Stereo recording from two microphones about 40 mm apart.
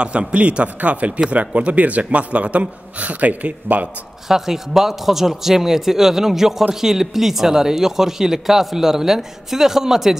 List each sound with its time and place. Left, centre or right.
0.0 s speech: right
4.3 s speech: centre